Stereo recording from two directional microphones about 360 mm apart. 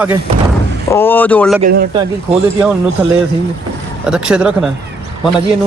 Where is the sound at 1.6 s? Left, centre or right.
Right.